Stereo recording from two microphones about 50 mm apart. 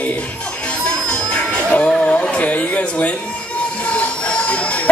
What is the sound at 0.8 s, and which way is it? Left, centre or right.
Music, centre.